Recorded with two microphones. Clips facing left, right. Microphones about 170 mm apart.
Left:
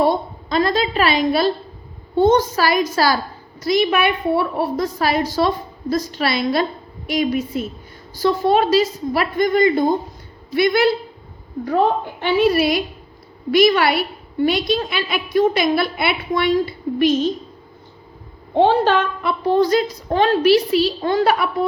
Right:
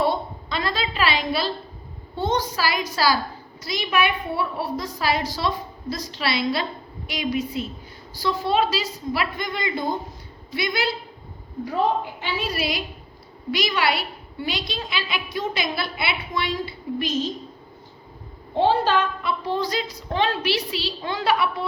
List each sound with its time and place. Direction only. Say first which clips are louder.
0.0 s a woman's voice: left 5 dB; 45° left (ahead or behind)
11.6 s a woman's voice: left 5 dB; 65° left (ahead or behind)
18.5 s a woman's voice: left 5 dB; 65° left (ahead or behind); by 21.7 s 45° left (ahead or behind)